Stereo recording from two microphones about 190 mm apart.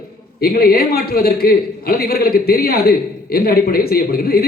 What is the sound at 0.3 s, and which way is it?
A man's voice, 55° left (ahead or behind).